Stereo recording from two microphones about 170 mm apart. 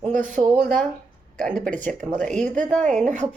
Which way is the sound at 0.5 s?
10° left (ahead or behind).